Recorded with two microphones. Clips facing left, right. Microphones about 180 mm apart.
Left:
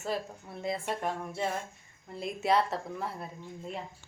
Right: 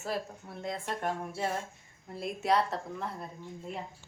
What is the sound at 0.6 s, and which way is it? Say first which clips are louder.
Speech: left 2 dB; 5° left (ahead or behind).